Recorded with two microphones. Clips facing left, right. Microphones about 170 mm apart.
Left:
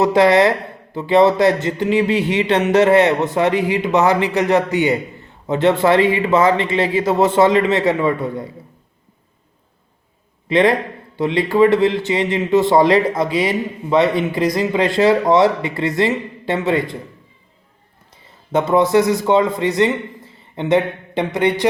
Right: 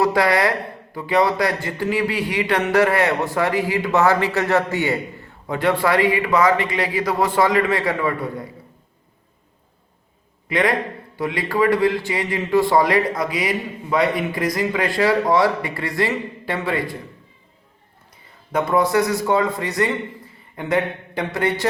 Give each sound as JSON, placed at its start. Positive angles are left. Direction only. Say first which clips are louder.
{"t": 0.0, "sound": "speech", "louder": "left 5 dB", "side_deg": 20}
{"t": 10.5, "sound": "speech", "louder": "left 5 dB", "side_deg": 25}
{"t": 18.5, "sound": "a man's voice", "louder": "left 4 dB", "side_deg": 25}